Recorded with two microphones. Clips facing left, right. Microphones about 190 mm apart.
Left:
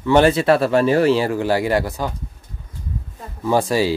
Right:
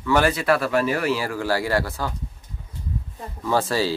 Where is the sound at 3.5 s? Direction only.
15° left (ahead or behind).